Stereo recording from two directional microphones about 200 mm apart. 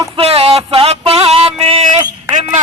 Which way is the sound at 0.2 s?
30° right (ahead or behind).